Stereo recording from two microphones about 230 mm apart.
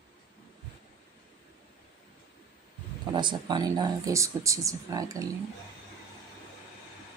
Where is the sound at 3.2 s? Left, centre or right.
Centre.